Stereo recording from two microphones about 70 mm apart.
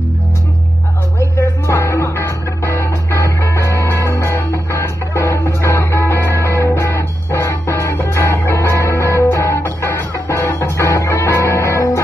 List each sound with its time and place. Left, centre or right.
1.7 s music: left